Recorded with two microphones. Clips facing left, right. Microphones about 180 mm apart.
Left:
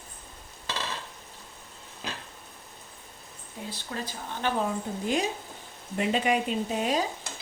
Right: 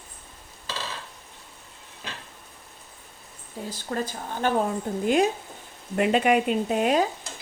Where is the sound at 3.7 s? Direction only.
45° right (ahead or behind).